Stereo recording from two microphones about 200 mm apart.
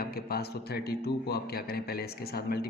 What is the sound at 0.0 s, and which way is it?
A man's voice, 50° left (ahead or behind).